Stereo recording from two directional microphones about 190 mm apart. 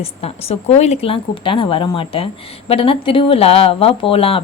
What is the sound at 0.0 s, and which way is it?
A woman's voice, 30° left (ahead or behind).